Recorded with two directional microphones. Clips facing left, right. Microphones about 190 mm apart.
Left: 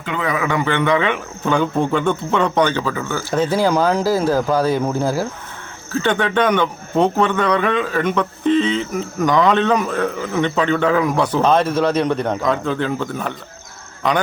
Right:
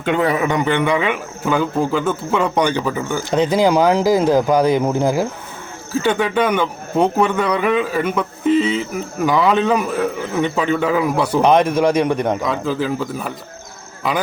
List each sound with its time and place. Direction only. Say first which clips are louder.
0.2 s a man's voice: right 1 dB; 30° right (ahead or behind)
0.4 s a man's voice: right 1 dB; 20° right (ahead or behind)